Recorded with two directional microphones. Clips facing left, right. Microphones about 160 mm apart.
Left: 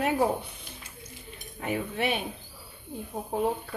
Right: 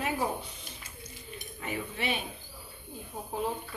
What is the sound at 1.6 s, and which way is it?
Speech, 55° left (ahead or behind).